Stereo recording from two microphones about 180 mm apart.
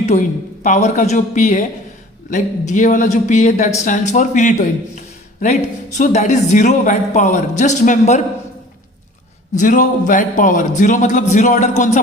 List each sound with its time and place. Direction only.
0.0 s a man's voice: 40° left (ahead or behind)
9.6 s a man's voice: 45° left (ahead or behind)